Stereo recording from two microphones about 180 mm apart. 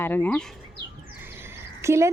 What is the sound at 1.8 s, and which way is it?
Speech, 15° right (ahead or behind).